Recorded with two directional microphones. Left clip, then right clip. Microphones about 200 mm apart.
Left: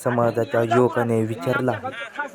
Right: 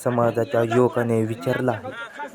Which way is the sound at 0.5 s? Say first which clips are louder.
Left 2 dB; 10° right (ahead or behind).